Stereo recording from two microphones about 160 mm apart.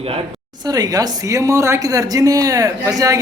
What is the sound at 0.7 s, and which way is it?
A man's voice, 25° right (ahead or behind).